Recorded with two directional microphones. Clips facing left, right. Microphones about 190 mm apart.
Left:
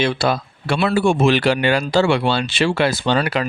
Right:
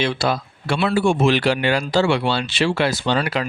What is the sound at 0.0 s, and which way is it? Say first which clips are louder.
A man's voice: left 2 dB; 55° left (ahead or behind).